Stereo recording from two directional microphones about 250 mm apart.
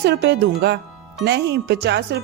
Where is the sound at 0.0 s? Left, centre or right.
Right.